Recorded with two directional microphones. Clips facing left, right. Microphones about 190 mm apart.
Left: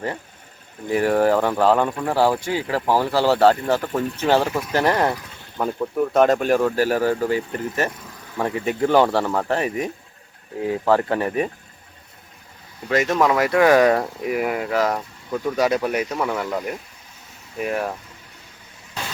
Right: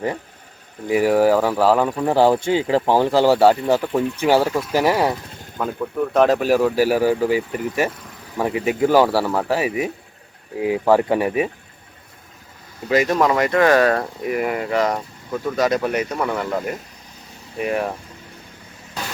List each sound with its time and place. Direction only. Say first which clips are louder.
0.9 s speech: right 2 dB; 10° right (ahead or behind)
2.0 s speech: right 4 dB; 20° right (ahead or behind)
6.1 s speech: right 1 dB; centre (ahead or behind)
12.9 s speech: right 1 dB; centre (ahead or behind)